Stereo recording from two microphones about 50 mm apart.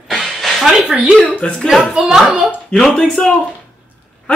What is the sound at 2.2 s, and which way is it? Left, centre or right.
Speech, right.